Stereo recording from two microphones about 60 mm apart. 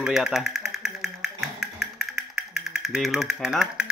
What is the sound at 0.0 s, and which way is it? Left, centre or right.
Music, centre.